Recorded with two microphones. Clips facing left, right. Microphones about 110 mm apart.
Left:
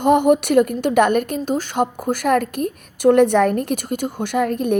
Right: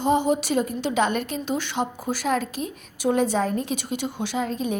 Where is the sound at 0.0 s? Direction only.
60° left (ahead or behind).